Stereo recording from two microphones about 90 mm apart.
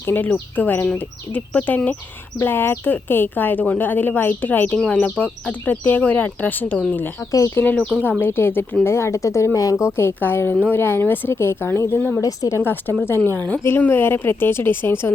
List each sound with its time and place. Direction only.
0.0 s a woman's voice: 20° left (ahead or behind)
7.3 s speech: 40° left (ahead or behind)
7.5 s a woman's voice: 20° left (ahead or behind)
12.2 s a woman's voice: 35° left (ahead or behind)